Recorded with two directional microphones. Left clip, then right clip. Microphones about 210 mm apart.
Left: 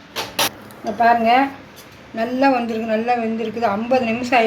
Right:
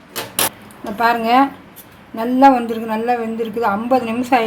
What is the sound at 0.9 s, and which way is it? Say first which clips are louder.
A woman's voice: even; 45° right (ahead or behind).